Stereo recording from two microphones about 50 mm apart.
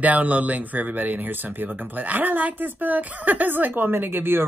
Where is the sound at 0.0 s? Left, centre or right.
Right.